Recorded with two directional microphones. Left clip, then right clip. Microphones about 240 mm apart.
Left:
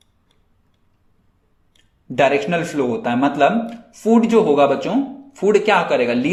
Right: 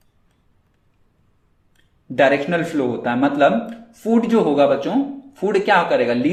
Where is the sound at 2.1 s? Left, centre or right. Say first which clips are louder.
Even; centre.